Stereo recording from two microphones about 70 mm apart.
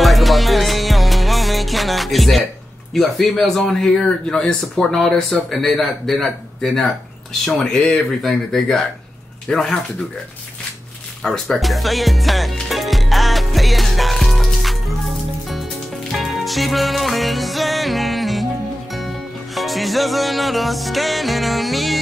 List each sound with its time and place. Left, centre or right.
0.0 s music: centre
2.9 s speech: centre
11.2 s music: centre
16.1 s music: centre